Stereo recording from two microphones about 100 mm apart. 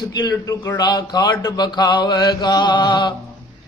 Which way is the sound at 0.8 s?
40° left (ahead or behind).